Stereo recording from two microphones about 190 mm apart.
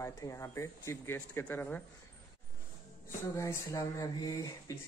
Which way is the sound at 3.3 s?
15° left (ahead or behind).